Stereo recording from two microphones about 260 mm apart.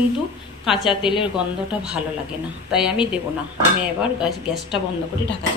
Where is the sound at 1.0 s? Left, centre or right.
Centre.